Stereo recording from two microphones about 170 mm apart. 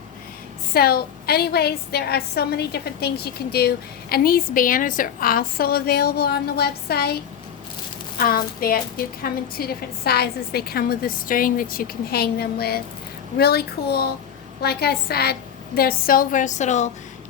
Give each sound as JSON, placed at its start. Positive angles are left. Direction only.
{"t": 0.7, "sound": "a woman's voice", "side_deg": 65}
{"t": 8.2, "sound": "a woman's voice", "side_deg": 60}